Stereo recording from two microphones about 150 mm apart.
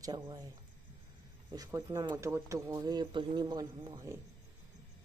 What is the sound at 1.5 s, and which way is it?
A woman's voice, 25° right (ahead or behind).